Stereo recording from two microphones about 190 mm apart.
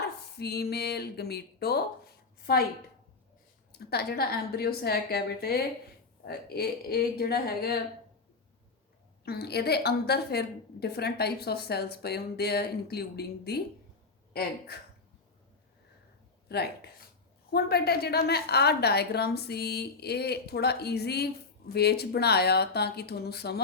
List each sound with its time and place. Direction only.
0.3 s a woman's voice: 55° left (ahead or behind)
3.7 s a woman's voice: 60° left (ahead or behind)
9.2 s a woman's voice: 55° left (ahead or behind)
14.7 s speech: 55° left (ahead or behind)
16.5 s a woman's voice: 60° left (ahead or behind)